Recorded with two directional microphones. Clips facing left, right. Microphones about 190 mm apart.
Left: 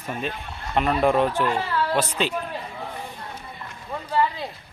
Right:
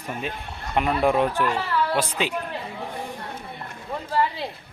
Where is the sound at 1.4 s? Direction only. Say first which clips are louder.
Left 1 dB; 15° left (ahead or behind).